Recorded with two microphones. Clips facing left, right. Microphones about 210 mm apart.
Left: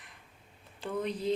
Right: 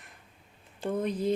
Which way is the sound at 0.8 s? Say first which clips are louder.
Right 4 dB; 45° right (ahead or behind).